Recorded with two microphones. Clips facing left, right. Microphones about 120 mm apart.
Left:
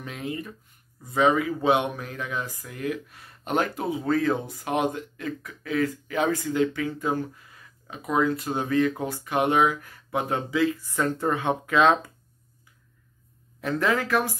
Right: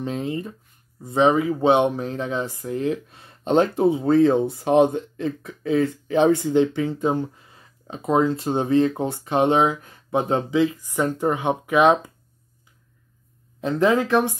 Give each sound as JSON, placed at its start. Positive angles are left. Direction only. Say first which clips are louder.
{"t": 0.0, "sound": "speech", "louder": "right 7 dB", "side_deg": -30}
{"t": 13.6, "sound": "speech", "louder": "right 6 dB", "side_deg": -20}